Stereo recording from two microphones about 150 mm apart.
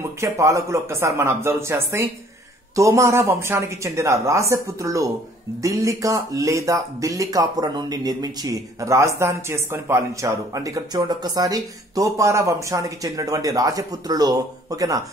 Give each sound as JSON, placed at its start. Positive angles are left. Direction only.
{"t": 0.2, "sound": "speech", "side_deg": -20}